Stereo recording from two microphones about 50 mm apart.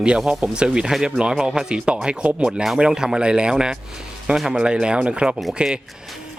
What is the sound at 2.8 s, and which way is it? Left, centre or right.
Speech, centre.